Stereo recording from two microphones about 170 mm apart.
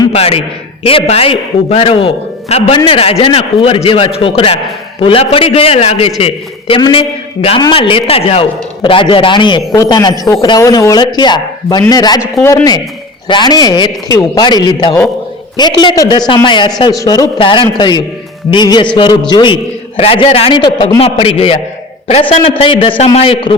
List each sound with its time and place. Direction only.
0.1 s a man's voice: 35° left (ahead or behind)